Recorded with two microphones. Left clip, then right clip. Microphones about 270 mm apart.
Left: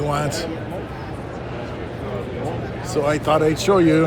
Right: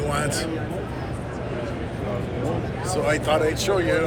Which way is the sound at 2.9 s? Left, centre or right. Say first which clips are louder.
Left 3 dB; left.